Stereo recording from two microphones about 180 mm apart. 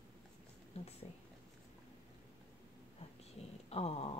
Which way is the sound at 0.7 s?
35° left (ahead or behind).